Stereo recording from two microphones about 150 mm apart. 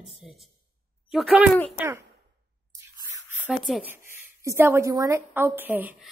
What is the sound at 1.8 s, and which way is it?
Speech, 15° right (ahead or behind).